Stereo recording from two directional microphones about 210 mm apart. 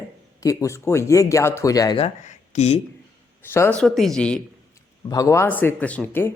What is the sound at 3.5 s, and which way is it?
Speech, 10° left (ahead or behind).